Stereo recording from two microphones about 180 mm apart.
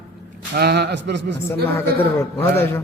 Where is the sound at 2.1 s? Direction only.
15° left (ahead or behind).